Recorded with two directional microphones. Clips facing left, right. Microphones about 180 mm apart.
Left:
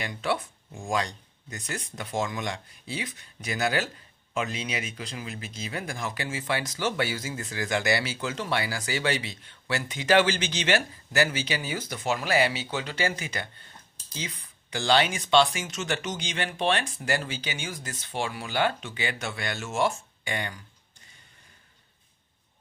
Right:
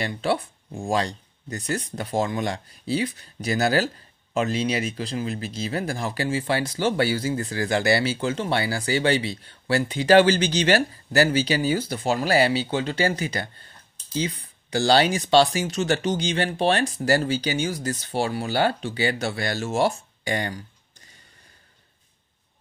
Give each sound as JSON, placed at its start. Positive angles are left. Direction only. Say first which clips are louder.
{"t": 0.0, "sound": "speech", "louder": "right 5 dB", "side_deg": -30}